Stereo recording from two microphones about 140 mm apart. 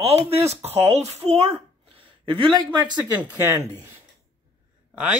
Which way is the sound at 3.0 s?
15° right (ahead or behind).